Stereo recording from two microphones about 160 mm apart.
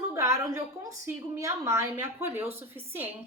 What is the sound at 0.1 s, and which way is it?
A woman's voice, 20° right (ahead or behind).